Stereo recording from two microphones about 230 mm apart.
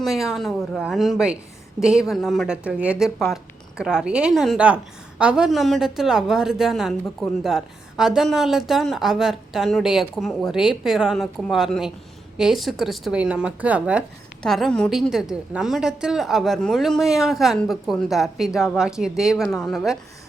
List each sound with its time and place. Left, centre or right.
0.0 s speech: centre